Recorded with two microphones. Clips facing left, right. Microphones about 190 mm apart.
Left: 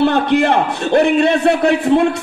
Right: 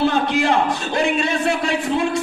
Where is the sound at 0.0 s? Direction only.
60° left (ahead or behind).